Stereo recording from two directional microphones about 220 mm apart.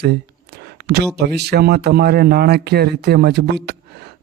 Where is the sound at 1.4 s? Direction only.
45° right (ahead or behind).